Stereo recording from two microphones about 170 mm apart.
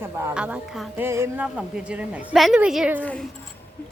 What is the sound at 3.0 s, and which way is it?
Speech, 10° left (ahead or behind).